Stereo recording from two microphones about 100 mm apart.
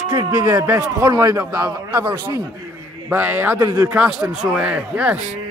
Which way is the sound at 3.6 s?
35° right (ahead or behind).